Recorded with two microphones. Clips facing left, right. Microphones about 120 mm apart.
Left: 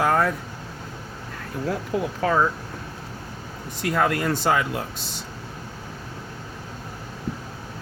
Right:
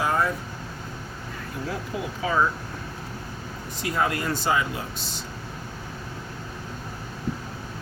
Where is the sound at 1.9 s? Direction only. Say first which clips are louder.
Left 7 dB; 60° left (ahead or behind).